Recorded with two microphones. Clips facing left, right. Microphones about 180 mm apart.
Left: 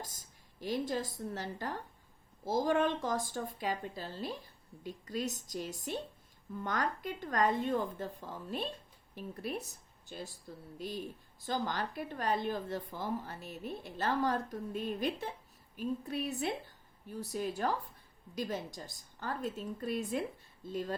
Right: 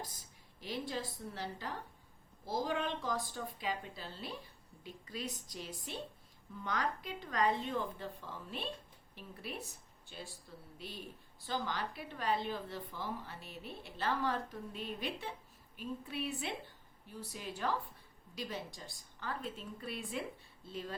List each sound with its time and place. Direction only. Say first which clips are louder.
0.6 s a woman's voice: left 5 dB; 45° left (ahead or behind)